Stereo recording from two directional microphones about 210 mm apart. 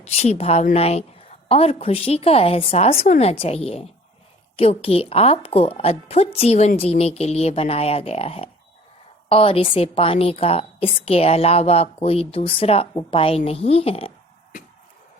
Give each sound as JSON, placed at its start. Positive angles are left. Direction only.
{"t": 0.0, "sound": "a woman's voice", "side_deg": 30}